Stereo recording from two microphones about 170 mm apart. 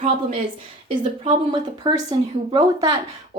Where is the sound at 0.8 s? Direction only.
30° right (ahead or behind).